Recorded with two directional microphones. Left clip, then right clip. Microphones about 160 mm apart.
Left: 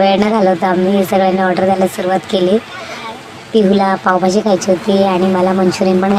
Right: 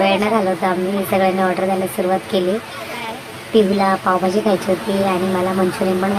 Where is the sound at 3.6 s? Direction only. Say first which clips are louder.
Left 3 dB; 30° left (ahead or behind).